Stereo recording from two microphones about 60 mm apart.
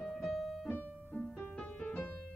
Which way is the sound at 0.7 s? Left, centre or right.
Left.